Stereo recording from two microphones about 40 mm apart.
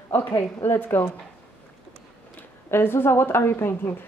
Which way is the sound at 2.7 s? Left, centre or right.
Left.